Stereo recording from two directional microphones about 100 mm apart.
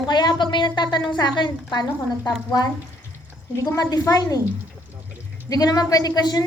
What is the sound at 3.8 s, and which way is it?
Speech, 40° left (ahead or behind).